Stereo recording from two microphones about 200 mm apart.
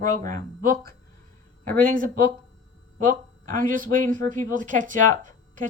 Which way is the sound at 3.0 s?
45° right (ahead or behind).